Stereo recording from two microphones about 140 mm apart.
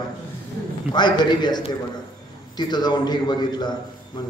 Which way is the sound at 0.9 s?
30° left (ahead or behind).